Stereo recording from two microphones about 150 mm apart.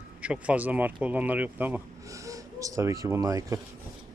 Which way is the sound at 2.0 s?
20° right (ahead or behind).